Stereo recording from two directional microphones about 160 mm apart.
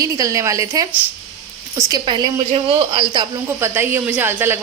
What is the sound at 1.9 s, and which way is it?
A woman's voice, 25° right (ahead or behind).